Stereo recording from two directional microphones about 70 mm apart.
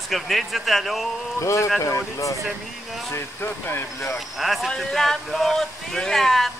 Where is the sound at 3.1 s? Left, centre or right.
Left.